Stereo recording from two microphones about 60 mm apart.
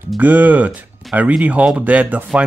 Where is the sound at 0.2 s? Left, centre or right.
Right.